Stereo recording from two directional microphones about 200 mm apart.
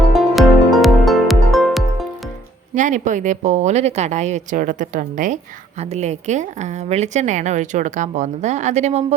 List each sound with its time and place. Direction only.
0.1 s music: centre (ahead or behind)
2.7 s a woman's voice: 40° right (ahead or behind)